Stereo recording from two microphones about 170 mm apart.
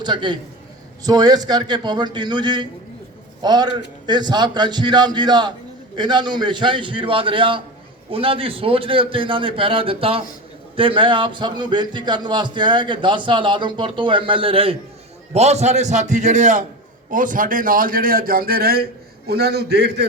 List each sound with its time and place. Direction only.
0.0 s a man's voice: 25° right (ahead or behind); by 20.1 s 75° right (ahead or behind)